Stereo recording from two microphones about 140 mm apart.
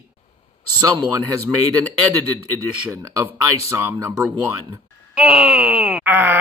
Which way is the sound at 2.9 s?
20° right (ahead or behind).